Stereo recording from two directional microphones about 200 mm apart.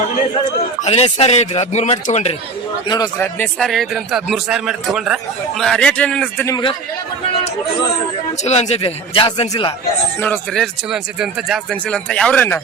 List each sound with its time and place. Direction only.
0.8 s speech: 35° left (ahead or behind)
2.9 s a man's voice: 15° left (ahead or behind)
8.4 s speech: 30° left (ahead or behind)
10.2 s a man's voice: 10° left (ahead or behind)